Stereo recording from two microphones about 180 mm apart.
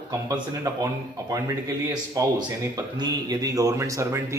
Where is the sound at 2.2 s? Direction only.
20° right (ahead or behind).